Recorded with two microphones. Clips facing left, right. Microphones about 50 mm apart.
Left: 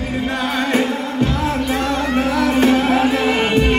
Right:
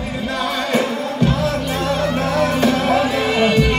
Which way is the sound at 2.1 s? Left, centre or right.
Centre.